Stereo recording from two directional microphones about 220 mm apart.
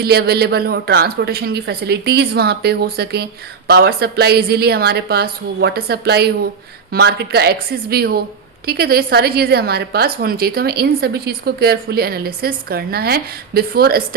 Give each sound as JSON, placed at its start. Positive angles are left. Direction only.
{"t": 0.0, "sound": "a woman's voice", "side_deg": -45}